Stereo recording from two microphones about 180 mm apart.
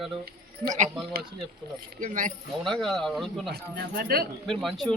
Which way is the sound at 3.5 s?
60° right (ahead or behind).